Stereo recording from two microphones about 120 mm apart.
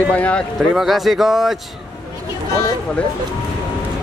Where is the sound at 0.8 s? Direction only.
Centre (ahead or behind).